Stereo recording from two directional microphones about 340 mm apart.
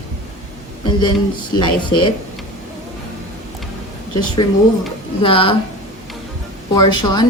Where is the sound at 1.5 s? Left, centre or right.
Centre.